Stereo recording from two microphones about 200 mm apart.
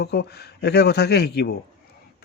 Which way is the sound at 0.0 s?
55° left (ahead or behind).